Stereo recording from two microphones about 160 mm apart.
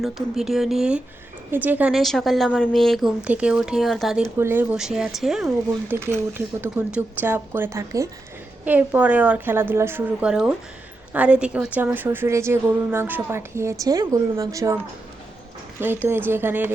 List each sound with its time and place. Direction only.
0.0 s a woman's voice: centre (ahead or behind)
4.4 s a woman's voice: 15° right (ahead or behind)
5.9 s a woman's voice: 15° right (ahead or behind)
16.0 s a woman's voice: 15° right (ahead or behind)